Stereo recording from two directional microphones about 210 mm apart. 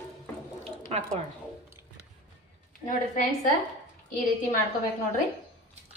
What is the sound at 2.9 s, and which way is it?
Speech, 40° left (ahead or behind).